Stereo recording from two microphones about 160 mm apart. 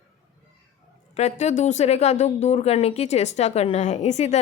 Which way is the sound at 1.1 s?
45° left (ahead or behind).